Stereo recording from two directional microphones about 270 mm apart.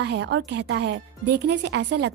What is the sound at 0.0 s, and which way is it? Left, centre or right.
A woman's voice, right.